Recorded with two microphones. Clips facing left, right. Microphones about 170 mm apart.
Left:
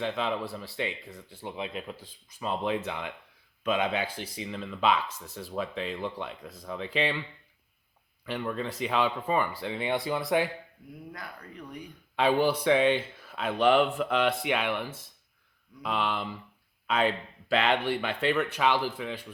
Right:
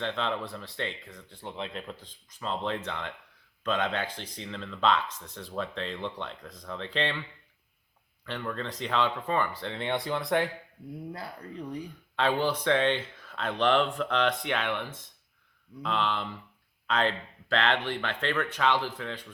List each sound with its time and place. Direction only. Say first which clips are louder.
0.0 s speech: left 1 dB; 10° left (ahead or behind)
11.1 s speech: right 4 dB; 30° right (ahead or behind)
12.1 s speech: left 3 dB; 10° left (ahead or behind)